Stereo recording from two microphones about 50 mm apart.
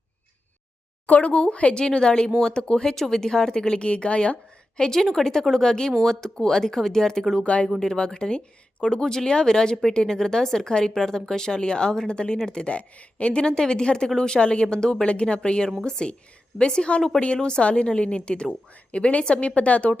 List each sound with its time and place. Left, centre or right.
1.0 s a woman's voice: left
4.8 s speech: centre
7.3 s a woman's voice: left